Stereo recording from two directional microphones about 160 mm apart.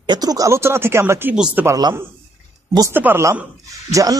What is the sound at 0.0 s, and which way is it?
A man's voice, 25° right (ahead or behind).